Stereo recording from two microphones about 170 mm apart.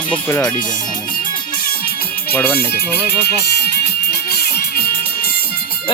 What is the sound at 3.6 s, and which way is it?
Music, 65° left (ahead or behind).